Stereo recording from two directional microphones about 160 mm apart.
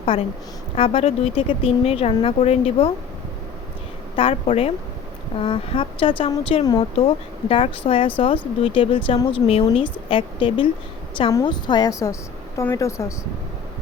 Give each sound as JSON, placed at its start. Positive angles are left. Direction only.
{"t": 0.8, "sound": "speech", "side_deg": 40}
{"t": 4.1, "sound": "a woman's voice", "side_deg": 35}